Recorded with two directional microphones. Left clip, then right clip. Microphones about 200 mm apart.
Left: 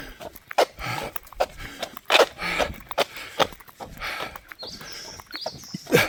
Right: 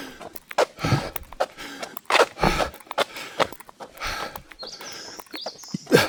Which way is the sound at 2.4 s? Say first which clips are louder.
Right 4 dB; 50° right (ahead or behind).